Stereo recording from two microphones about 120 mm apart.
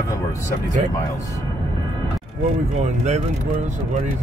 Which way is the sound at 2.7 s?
70° right (ahead or behind).